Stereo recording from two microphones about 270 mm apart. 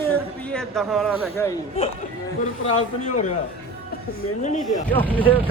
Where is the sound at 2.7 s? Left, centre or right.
Left.